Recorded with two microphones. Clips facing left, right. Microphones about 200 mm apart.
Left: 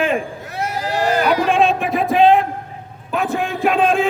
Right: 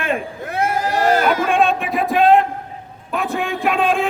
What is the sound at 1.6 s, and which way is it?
A man's voice, centre (ahead or behind).